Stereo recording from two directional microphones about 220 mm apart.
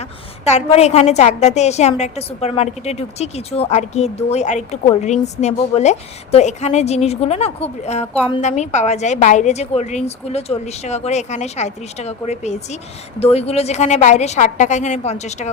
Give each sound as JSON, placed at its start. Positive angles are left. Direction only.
{"t": 0.0, "sound": "a woman's voice", "side_deg": 30}